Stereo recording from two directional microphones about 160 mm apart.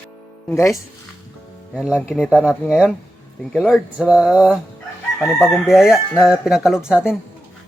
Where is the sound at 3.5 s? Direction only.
5° right (ahead or behind).